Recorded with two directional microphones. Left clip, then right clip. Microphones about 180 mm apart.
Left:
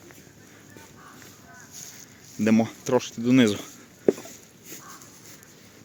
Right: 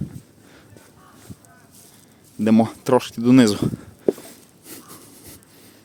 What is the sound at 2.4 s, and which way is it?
Speech, 35° right (ahead or behind).